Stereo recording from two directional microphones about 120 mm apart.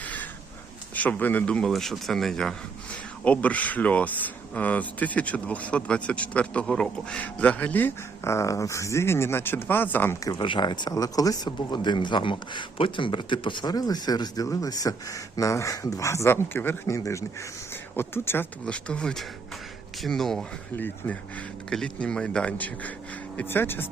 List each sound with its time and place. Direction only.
0.0 s a sound: 10° left (ahead or behind)
0.9 s speech: 15° left (ahead or behind)
10.2 s speech: 40° left (ahead or behind); by 20.4 s 5° left (ahead or behind)
20.7 s speech: 15° left (ahead or behind)